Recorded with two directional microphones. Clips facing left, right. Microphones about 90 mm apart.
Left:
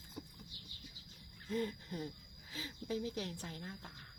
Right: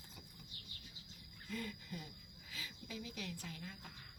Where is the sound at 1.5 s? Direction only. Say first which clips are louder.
Left 7 dB; 40° left (ahead or behind).